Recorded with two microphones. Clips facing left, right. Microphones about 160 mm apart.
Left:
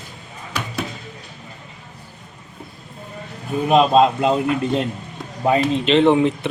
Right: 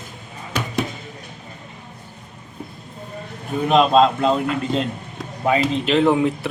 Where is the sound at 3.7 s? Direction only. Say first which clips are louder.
Left 1 dB; 15° left (ahead or behind).